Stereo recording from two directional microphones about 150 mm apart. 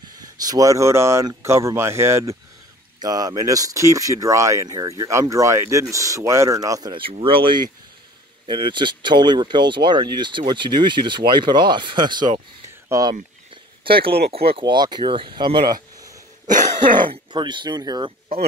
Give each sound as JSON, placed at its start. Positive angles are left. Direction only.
{"t": 0.1, "sound": "speech", "side_deg": -25}
{"t": 12.8, "sound": "a sound", "side_deg": -20}
{"t": 14.5, "sound": "speech", "side_deg": -30}